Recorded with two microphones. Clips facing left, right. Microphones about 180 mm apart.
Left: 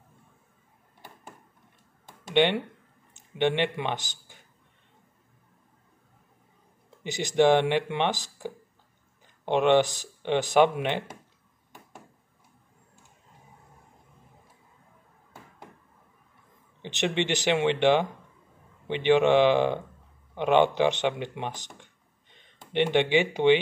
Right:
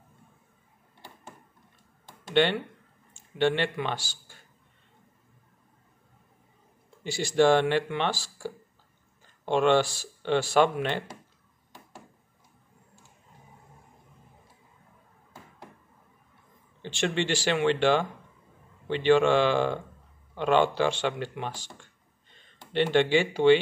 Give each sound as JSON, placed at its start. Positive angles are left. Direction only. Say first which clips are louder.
{"t": 2.3, "sound": "speech", "louder": "left 1 dB", "side_deg": 15}
{"t": 7.0, "sound": "speech", "louder": "even", "side_deg": 20}
{"t": 9.5, "sound": "speech", "louder": "left 1 dB", "side_deg": 15}
{"t": 16.8, "sound": "speech", "louder": "left 1 dB", "side_deg": 20}